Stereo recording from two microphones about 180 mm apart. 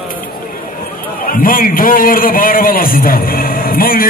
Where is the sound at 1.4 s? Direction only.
50° left (ahead or behind).